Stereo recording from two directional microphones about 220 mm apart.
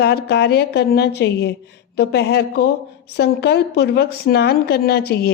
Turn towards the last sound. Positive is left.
turn(degrees=45)  # may be behind; listen again after turning